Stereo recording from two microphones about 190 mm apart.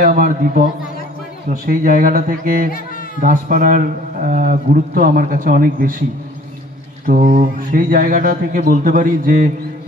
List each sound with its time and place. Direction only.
0.0 s a man's voice: 45° right (ahead or behind)
7.1 s a man's voice: 40° right (ahead or behind)